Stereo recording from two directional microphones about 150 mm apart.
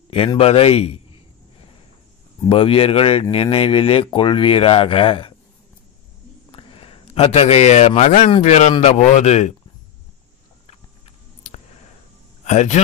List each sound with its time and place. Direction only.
0.1 s speech: 40° left (ahead or behind)
2.5 s speech: 40° left (ahead or behind)
6.5 s a man's voice: 35° left (ahead or behind)
12.4 s a man's voice: 50° left (ahead or behind)